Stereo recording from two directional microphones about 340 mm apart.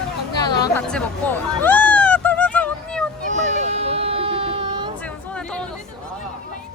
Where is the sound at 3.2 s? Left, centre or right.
Right.